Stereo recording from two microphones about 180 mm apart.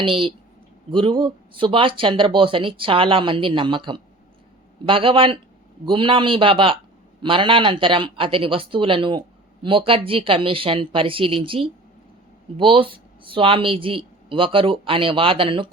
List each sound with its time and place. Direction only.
0.0 s speech: 30° right (ahead or behind)